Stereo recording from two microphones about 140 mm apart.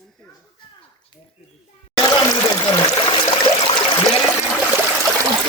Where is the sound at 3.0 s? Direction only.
35° left (ahead or behind).